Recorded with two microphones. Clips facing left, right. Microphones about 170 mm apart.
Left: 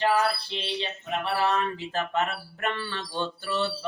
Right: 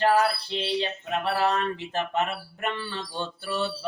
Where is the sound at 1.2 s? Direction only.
40° right (ahead or behind).